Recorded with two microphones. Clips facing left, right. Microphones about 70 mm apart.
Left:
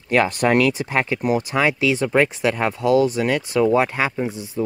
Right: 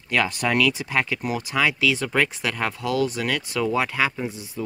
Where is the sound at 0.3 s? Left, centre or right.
Left.